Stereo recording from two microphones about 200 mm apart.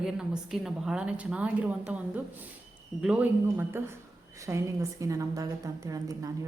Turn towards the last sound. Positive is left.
turn(degrees=-15)  # may be behind; listen again after turning